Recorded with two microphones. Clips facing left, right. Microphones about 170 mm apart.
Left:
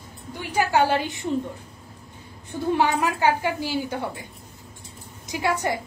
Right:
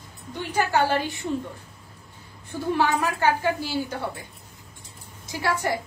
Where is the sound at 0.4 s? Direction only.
10° left (ahead or behind).